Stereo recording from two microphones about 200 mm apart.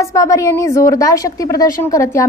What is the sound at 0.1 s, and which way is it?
A woman's voice, 15° left (ahead or behind).